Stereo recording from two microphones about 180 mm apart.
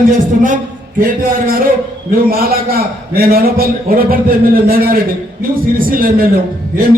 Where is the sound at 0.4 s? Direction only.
50° right (ahead or behind).